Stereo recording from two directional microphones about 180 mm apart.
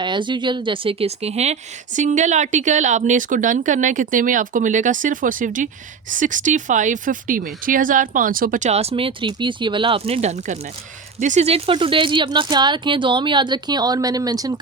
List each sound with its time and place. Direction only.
0.0 s speech: 25° right (ahead or behind)